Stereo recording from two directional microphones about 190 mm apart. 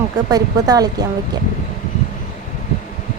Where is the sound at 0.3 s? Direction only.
20° right (ahead or behind).